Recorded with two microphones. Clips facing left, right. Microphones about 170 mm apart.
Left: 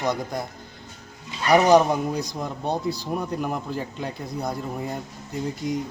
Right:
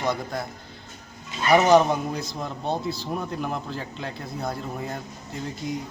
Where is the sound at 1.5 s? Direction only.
10° left (ahead or behind).